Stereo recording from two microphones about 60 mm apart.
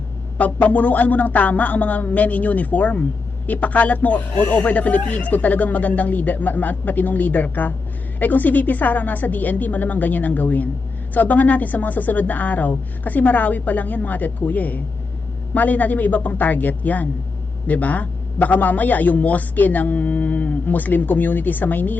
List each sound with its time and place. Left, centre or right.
0.3 s a man's voice: left